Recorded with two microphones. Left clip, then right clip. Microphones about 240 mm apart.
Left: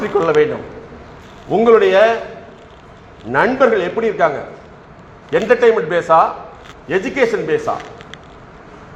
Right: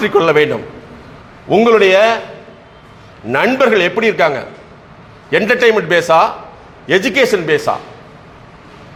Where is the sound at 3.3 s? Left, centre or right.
Right.